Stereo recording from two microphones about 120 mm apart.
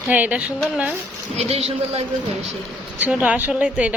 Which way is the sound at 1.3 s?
60° right (ahead or behind).